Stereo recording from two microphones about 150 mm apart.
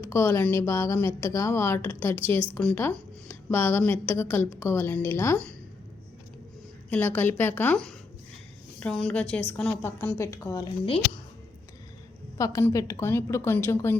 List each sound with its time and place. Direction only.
0.0 s a woman's voice: 15° left (ahead or behind)
6.9 s a woman's voice: 10° left (ahead or behind)
10.8 s a woman's voice: 35° left (ahead or behind)
12.4 s a woman's voice: 20° left (ahead or behind)